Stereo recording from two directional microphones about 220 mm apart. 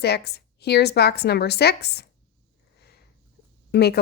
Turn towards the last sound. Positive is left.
turn(degrees=45)  # may be behind; listen again after turning